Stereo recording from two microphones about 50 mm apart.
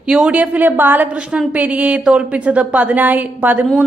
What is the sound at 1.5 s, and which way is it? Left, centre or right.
A woman's voice, right.